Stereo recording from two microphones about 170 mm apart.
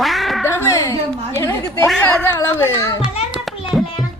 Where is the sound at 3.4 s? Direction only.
Centre (ahead or behind).